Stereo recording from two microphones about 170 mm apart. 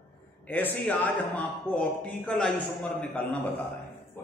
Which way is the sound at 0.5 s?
10° left (ahead or behind).